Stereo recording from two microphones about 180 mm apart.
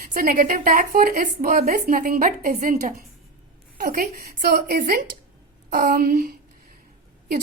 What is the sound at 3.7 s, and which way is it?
A woman's voice, 55° right (ahead or behind).